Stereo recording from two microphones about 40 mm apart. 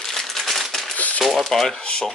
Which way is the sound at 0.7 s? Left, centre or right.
Centre.